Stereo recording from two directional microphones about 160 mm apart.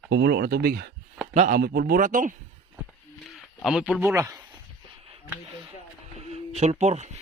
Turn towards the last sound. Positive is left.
turn(degrees=-45)  # may be behind; listen again after turning